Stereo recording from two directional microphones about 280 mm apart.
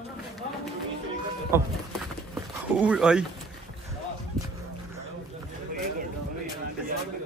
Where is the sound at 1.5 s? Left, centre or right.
Centre.